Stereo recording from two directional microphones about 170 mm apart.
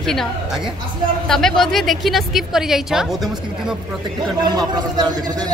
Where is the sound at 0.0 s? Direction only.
Centre (ahead or behind).